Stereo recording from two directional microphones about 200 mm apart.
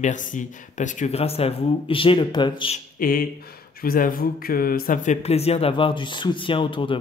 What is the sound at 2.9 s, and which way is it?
Speech, 45° left (ahead or behind).